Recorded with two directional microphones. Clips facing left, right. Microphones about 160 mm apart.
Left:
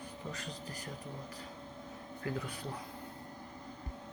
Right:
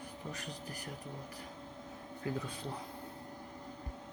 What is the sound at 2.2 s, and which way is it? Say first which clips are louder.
Speech: even; 20° right (ahead or behind).